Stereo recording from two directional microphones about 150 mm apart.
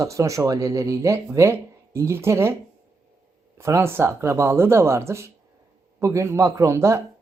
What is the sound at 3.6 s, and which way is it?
Speech, 15° right (ahead or behind).